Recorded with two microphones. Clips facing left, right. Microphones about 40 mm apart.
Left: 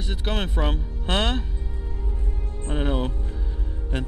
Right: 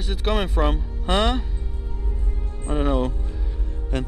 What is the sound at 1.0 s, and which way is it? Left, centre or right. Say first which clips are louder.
Speech: right 3 dB; centre.